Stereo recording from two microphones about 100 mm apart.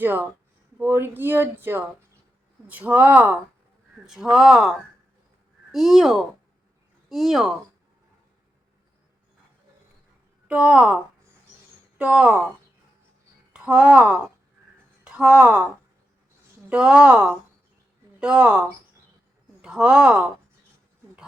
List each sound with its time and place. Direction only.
0.0 s speech: 20° right (ahead or behind); by 7.5 s centre (ahead or behind)
10.5 s speech: 10° right (ahead or behind)
13.5 s speech: 10° right (ahead or behind)
16.6 s a woman's voice: 10° right (ahead or behind)
19.6 s speech: 5° right (ahead or behind)